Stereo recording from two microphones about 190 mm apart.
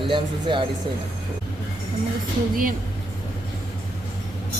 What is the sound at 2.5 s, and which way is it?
Speech, 45° right (ahead or behind).